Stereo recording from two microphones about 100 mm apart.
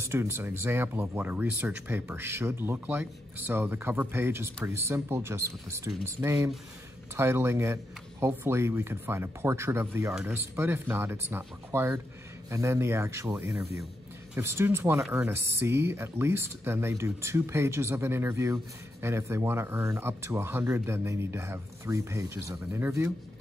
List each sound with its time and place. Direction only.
0.0 s speech: 25° right (ahead or behind)